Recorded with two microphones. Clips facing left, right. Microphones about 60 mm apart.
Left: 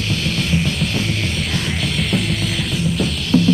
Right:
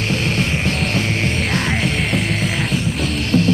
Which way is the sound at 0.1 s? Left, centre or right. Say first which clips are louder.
Even; right.